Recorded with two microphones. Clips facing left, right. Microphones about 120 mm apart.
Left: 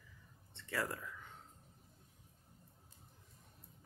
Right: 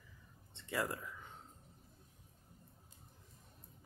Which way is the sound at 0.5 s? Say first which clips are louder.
Right 1 dB; 20° right (ahead or behind).